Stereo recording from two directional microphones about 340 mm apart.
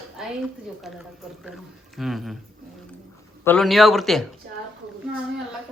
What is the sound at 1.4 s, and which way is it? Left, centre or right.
Speech, centre.